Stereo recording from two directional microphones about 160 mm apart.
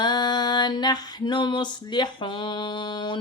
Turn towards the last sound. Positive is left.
turn(degrees=30)  # may be behind; listen again after turning